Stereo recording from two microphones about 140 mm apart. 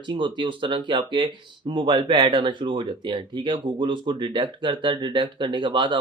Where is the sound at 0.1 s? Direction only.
35° right (ahead or behind).